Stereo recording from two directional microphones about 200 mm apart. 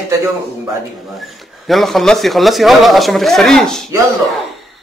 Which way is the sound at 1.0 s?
Centre (ahead or behind).